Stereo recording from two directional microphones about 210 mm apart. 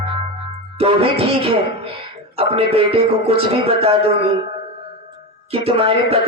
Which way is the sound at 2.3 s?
25° right (ahead or behind).